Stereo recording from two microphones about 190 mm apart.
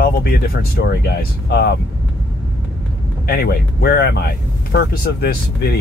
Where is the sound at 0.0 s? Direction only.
55° left (ahead or behind).